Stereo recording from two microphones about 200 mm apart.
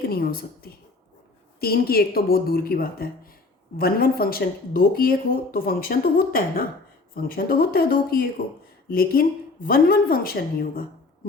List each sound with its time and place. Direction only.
0.1 s a woman's voice: 50° left (ahead or behind)
1.6 s speech: 50° left (ahead or behind)